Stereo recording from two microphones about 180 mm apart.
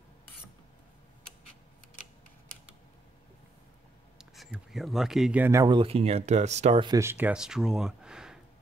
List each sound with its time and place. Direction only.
4.2 s speech: centre (ahead or behind)
5.8 s speech: 35° right (ahead or behind)
6.9 s speech: 15° right (ahead or behind)